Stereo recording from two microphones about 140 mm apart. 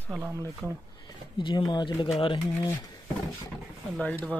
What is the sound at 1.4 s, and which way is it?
Speech, 35° left (ahead or behind).